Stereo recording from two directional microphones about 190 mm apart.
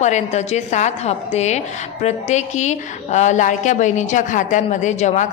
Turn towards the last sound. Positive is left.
turn(degrees=40)  # may be behind; listen again after turning